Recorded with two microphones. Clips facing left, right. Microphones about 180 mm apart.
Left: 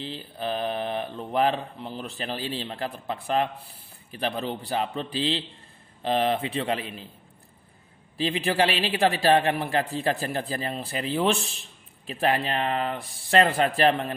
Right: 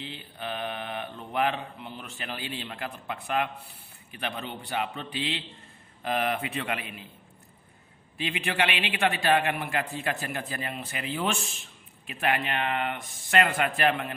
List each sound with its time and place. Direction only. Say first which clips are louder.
0.0 s a man's voice: left 6 dB; 35° left (ahead or behind)
8.2 s speech: left 5 dB; 35° left (ahead or behind)